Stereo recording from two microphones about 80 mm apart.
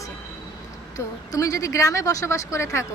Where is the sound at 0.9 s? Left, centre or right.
Left.